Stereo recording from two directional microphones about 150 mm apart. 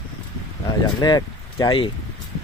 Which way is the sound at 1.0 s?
25° left (ahead or behind).